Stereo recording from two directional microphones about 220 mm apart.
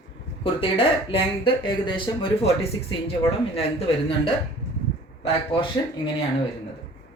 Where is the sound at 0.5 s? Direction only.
25° left (ahead or behind).